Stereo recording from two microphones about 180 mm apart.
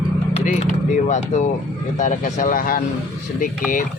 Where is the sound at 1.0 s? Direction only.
40° left (ahead or behind).